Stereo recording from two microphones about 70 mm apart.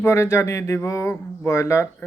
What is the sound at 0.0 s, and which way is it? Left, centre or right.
A man's voice, left.